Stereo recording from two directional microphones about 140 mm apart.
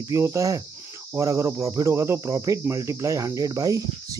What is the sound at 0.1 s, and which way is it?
Cricket, 20° right (ahead or behind).